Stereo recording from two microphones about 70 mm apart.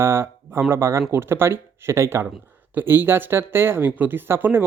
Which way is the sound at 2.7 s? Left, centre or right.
Right.